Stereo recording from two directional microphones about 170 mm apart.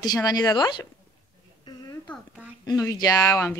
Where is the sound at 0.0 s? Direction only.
25° left (ahead or behind).